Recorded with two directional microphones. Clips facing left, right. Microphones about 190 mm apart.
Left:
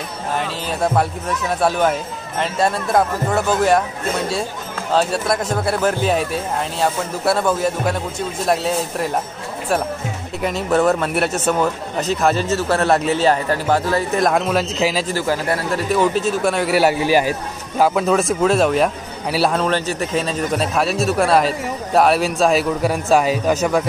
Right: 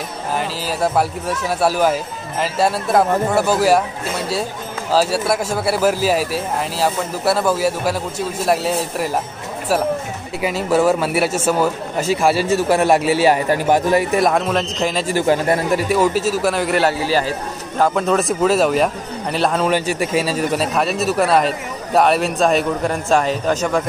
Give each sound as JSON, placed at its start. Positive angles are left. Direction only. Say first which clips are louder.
{"t": 0.3, "sound": "speech", "louder": "right 1 dB", "side_deg": -5}
{"t": 10.4, "sound": "speech", "louder": "right 1 dB", "side_deg": -5}
{"t": 14.2, "sound": "speech", "louder": "even", "side_deg": 0}
{"t": 15.0, "sound": "speech", "louder": "right 4 dB", "side_deg": -20}
{"t": 15.9, "sound": "speech", "louder": "left 2 dB", "side_deg": -5}
{"t": 19.6, "sound": "speech", "louder": "right 2 dB", "side_deg": -10}